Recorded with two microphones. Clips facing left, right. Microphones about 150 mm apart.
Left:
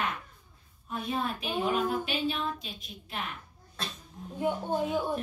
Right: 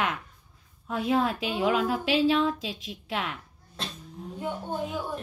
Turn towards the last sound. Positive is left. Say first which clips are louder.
# left 3 dB
turn(degrees=20)  # may be behind; listen again after turning